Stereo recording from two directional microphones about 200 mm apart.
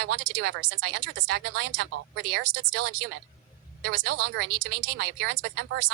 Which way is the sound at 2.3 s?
55° right (ahead or behind).